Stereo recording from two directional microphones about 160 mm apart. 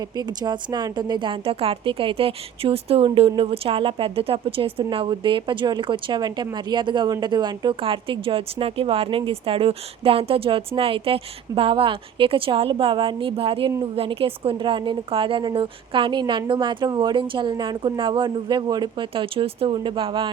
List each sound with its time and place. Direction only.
0.2 s a woman's voice: 25° right (ahead or behind)